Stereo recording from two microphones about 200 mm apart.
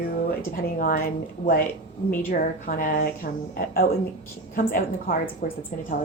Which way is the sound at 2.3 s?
45° left (ahead or behind).